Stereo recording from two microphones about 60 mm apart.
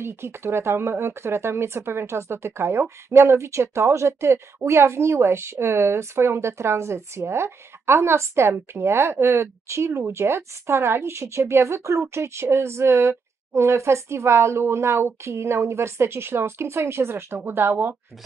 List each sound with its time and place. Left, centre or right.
0.0 s a woman's voice: right